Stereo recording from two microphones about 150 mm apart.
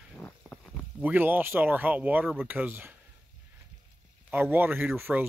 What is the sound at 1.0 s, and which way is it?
Speech, 10° right (ahead or behind).